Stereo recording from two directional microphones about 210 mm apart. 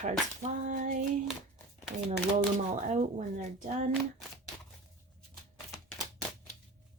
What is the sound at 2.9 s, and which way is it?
Speech, 35° right (ahead or behind).